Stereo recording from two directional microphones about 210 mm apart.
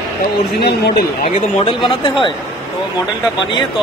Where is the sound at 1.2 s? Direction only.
30° left (ahead or behind).